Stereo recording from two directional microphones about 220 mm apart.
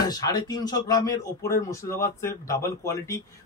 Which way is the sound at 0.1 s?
15° left (ahead or behind).